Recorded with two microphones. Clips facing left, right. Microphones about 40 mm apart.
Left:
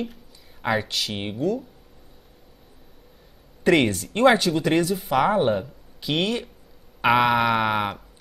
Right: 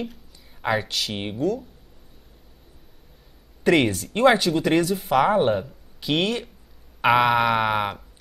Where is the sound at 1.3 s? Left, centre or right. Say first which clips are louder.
Even; left.